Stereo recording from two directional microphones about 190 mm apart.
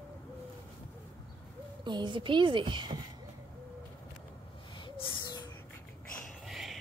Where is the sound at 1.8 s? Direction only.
25° right (ahead or behind).